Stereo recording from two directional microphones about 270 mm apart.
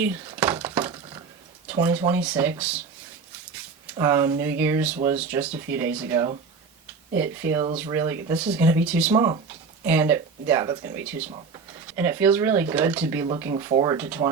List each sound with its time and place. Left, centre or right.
0.0 s a sound: centre
1.6 s speech: centre
3.9 s speech: centre
11.3 s speech: right
11.9 s speech: centre